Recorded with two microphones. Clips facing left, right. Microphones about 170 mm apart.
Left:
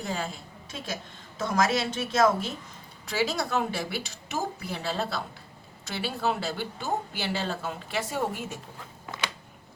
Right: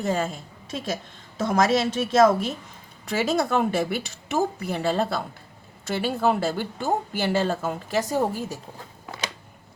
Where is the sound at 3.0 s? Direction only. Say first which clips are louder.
Right 5 dB; 50° right (ahead or behind).